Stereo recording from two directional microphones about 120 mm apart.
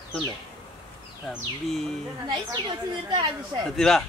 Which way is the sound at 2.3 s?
40° right (ahead or behind).